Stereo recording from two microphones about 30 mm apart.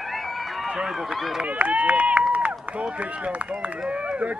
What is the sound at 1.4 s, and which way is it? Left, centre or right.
Speech, right.